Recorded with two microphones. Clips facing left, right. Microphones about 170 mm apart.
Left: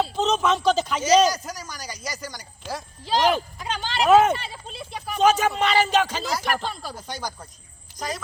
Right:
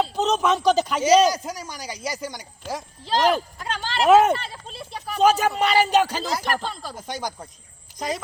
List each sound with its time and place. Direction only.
0.1 s speech: 10° right (ahead or behind)
1.3 s a man's voice: 25° right (ahead or behind)
3.1 s speech: centre (ahead or behind)
6.4 s speech: 5° left (ahead or behind)
6.9 s a man's voice: 20° right (ahead or behind)